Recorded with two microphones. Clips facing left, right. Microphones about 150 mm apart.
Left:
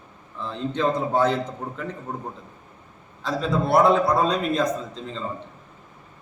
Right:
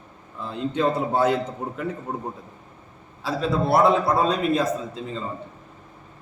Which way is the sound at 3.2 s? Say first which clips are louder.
Right 1 dB; 5° right (ahead or behind).